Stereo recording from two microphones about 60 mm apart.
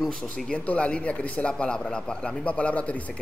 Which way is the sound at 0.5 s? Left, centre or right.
Left.